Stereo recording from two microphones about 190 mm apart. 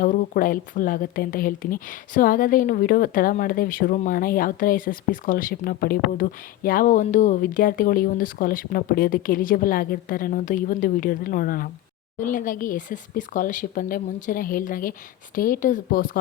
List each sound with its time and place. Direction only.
0.0 s speech: 45° left (ahead or behind)